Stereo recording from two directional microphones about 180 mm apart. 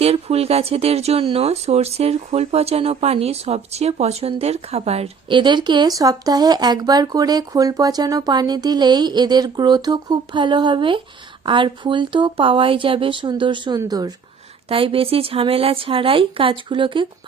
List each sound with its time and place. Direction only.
0.0 s speech: 35° right (ahead or behind)